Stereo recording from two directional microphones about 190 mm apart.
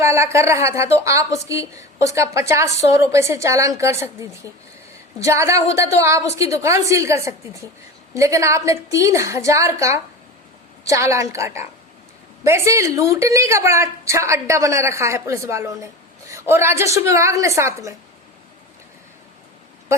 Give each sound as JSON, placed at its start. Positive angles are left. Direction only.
{"t": 0.0, "sound": "a woman's voice", "side_deg": -15}